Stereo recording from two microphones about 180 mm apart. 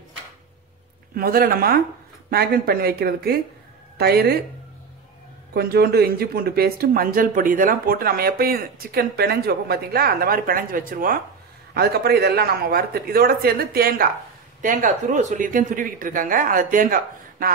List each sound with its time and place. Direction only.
1.1 s speech: 55° right (ahead or behind)
5.5 s speech: 60° right (ahead or behind)
11.7 s speech: 60° right (ahead or behind)
14.6 s speech: 45° right (ahead or behind)